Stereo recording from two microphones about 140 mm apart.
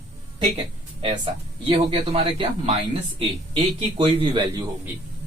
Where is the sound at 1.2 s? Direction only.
40° right (ahead or behind).